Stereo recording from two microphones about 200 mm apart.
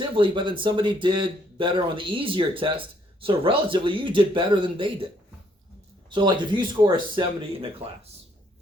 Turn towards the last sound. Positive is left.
turn(degrees=-25)  # may be behind; listen again after turning